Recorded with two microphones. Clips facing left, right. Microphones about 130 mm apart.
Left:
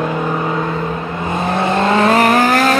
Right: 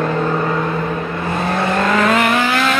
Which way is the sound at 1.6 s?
25° left (ahead or behind).